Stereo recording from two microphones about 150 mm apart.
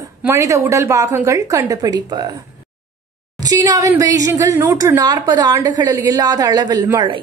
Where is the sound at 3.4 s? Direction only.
25° right (ahead or behind).